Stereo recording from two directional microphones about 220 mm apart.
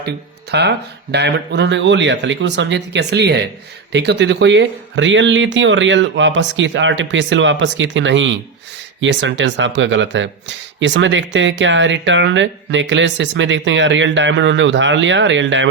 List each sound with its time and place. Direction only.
0.5 s speech: 50° right (ahead or behind)